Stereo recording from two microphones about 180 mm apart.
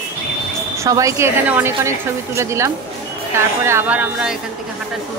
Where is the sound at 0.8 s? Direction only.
15° right (ahead or behind).